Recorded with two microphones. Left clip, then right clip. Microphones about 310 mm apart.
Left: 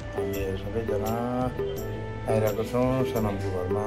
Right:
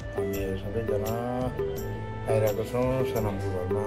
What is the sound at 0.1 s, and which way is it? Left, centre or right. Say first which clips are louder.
Speech: left 1 dB; centre.